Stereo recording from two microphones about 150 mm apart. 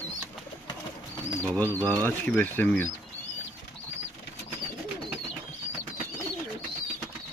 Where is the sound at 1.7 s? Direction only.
20° right (ahead or behind).